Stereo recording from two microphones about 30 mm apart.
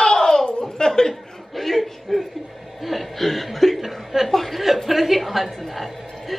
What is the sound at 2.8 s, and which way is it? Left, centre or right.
Chuckle, centre.